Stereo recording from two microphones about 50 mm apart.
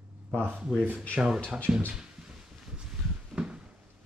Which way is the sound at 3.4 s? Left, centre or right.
Centre.